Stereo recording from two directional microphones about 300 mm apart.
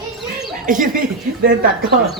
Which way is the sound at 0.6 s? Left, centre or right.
Right.